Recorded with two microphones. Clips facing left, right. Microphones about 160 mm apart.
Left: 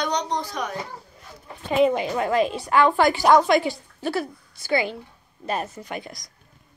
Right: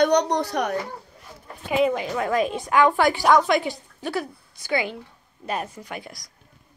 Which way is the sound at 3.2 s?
10° left (ahead or behind).